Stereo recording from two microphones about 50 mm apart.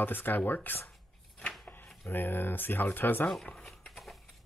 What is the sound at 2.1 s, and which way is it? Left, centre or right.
Speech, left.